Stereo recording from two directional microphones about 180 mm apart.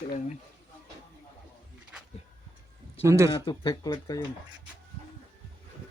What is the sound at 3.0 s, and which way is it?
Speech, 15° right (ahead or behind).